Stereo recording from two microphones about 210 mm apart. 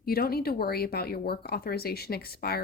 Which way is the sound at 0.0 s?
45° left (ahead or behind).